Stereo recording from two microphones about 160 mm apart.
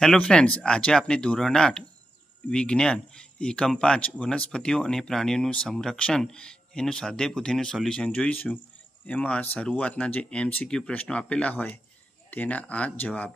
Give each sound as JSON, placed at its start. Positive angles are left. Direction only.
{"t": 0.0, "sound": "speech", "side_deg": 5}